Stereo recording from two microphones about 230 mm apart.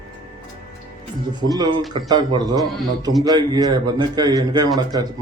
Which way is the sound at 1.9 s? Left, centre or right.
Centre.